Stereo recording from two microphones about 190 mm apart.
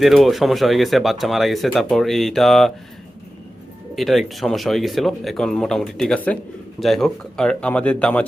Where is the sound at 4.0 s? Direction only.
Centre (ahead or behind).